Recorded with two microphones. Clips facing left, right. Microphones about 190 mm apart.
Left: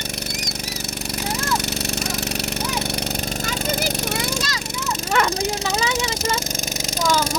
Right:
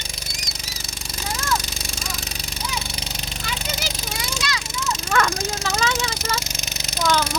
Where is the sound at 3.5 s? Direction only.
50° left (ahead or behind).